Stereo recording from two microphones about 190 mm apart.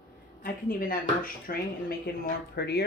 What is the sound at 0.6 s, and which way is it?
Speech, 50° left (ahead or behind).